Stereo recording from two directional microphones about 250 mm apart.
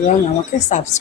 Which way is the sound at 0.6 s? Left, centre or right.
Left.